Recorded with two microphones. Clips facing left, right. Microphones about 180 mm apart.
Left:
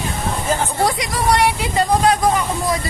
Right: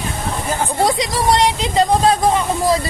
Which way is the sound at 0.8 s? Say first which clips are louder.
Right 2 dB; 20° right (ahead or behind).